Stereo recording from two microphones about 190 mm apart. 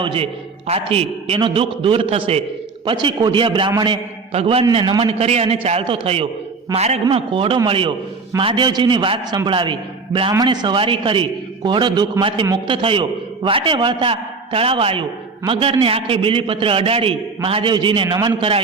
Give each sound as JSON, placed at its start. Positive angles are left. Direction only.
{"t": 0.0, "sound": "a man's voice", "side_deg": -30}